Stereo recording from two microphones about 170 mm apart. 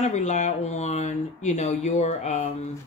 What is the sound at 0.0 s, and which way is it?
Speech, 45° left (ahead or behind).